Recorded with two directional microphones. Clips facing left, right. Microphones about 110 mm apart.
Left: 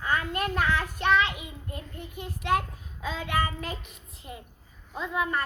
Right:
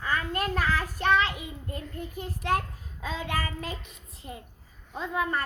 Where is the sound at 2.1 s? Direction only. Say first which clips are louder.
Left 1 dB; 35° right (ahead or behind).